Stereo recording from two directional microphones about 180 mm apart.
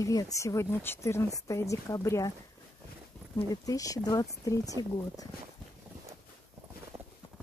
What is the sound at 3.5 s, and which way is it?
Speech, 20° left (ahead or behind).